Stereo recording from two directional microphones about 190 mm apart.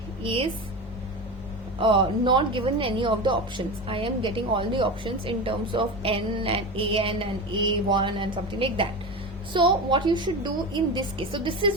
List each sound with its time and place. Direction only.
0.2 s a woman's voice: 25° right (ahead or behind)
1.8 s a woman's voice: 25° right (ahead or behind)